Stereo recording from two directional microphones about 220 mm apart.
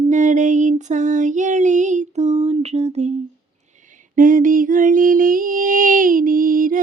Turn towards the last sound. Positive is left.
turn(degrees=-40)  # may be behind; listen again after turning